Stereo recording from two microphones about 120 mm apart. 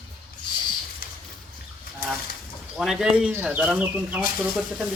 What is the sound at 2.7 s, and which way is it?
Speech, centre (ahead or behind).